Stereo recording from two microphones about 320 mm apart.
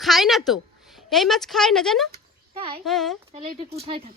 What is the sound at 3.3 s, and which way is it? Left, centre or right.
Speech, centre.